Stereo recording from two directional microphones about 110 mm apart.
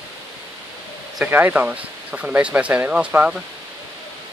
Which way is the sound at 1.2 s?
15° right (ahead or behind).